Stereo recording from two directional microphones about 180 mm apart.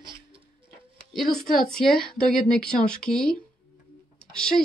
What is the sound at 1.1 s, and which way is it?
Speech, centre (ahead or behind).